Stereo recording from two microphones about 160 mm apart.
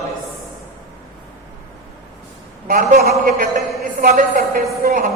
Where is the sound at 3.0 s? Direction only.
70° right (ahead or behind).